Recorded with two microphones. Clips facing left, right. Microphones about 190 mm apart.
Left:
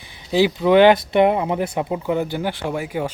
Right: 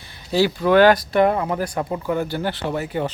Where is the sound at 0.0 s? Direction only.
15° left (ahead or behind).